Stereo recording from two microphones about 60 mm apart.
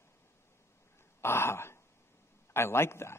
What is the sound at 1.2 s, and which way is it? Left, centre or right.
A man's voice, left.